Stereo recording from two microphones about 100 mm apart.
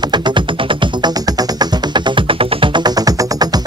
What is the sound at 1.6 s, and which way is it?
Music, 50° right (ahead or behind).